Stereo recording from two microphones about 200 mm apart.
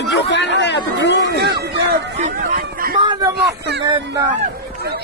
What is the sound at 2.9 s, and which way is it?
Speech, 20° right (ahead or behind).